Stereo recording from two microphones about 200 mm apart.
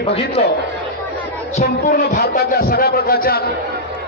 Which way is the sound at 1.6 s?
50° left (ahead or behind).